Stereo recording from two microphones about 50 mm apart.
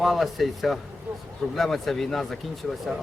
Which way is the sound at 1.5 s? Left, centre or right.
Centre.